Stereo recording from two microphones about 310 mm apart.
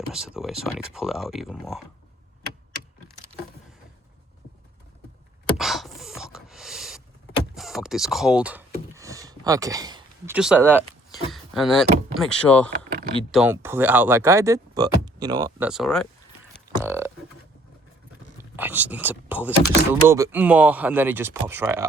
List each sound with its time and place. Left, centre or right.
0.1 s speech: centre
5.5 s a sound: centre
12.1 s speech: centre
18.5 s speech: centre